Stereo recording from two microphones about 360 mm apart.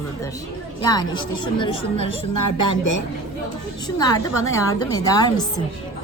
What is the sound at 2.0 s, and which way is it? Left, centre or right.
Speech, left.